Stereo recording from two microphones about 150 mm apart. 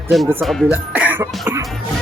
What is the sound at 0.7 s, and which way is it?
Speech, 10° right (ahead or behind).